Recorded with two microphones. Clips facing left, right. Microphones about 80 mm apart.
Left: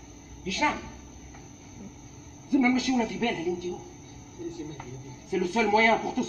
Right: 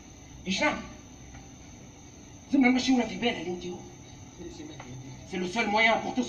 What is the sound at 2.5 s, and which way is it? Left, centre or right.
Speech, left.